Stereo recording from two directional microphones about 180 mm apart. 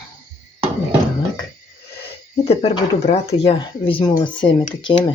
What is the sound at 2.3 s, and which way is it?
Speech, 35° left (ahead or behind).